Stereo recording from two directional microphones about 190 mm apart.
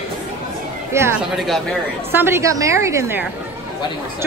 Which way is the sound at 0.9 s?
15° right (ahead or behind).